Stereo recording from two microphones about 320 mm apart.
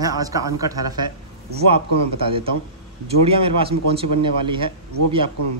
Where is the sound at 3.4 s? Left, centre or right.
Centre.